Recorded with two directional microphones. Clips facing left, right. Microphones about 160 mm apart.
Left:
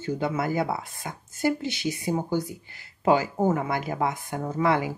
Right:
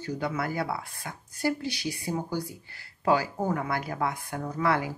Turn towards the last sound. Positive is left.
turn(degrees=20)  # may be behind; listen again after turning